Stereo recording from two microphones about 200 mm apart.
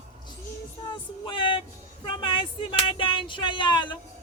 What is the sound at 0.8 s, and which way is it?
Speech, 25° left (ahead or behind).